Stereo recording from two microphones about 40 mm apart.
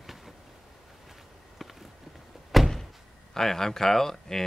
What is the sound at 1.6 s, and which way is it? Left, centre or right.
Run, centre.